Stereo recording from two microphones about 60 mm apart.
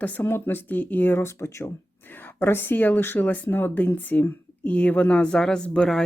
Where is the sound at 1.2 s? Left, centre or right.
Left.